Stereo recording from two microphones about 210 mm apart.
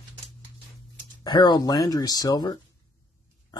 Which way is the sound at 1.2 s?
20° left (ahead or behind).